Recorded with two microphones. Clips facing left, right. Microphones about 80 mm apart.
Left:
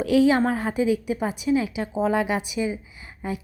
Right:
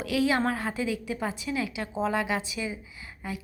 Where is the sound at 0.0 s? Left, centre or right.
Left.